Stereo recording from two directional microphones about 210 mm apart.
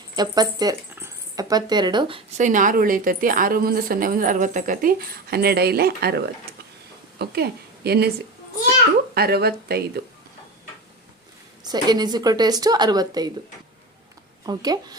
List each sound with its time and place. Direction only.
0.2 s speech: 20° right (ahead or behind)
2.5 s a woman's voice: 40° right (ahead or behind)
9.1 s speech: 50° right (ahead or behind)
11.6 s speech: 20° right (ahead or behind)
14.4 s speech: 20° right (ahead or behind)